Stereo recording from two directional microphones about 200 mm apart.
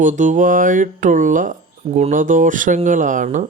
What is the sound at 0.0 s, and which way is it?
Speech, 40° right (ahead or behind).